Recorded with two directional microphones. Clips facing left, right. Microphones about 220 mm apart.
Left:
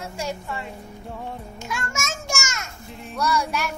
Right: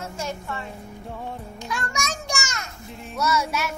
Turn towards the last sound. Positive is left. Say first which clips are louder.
# even
turn(degrees=-5)  # may be behind; listen again after turning